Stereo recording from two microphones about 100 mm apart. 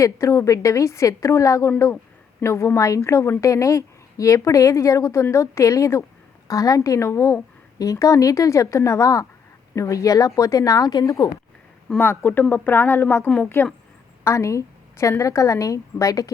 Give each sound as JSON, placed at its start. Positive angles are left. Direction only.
{"t": 0.0, "sound": "a woman's voice", "side_deg": 30}
{"t": 11.9, "sound": "a woman's voice", "side_deg": 20}
{"t": 14.3, "sound": "a woman's voice", "side_deg": 30}